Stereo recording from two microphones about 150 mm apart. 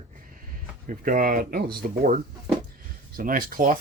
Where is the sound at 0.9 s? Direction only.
65° right (ahead or behind).